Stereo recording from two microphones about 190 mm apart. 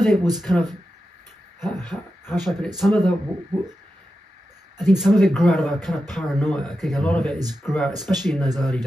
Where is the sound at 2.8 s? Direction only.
5° left (ahead or behind).